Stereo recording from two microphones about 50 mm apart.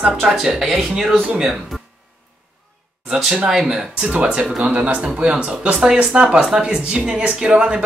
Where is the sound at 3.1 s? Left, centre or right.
Centre.